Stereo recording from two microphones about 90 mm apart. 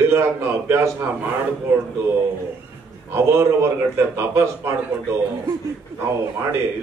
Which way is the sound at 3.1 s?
30° right (ahead or behind).